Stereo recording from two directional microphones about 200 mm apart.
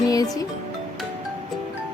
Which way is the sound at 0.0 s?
20° left (ahead or behind).